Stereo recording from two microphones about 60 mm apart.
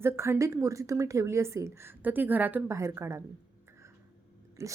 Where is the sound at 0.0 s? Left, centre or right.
Right.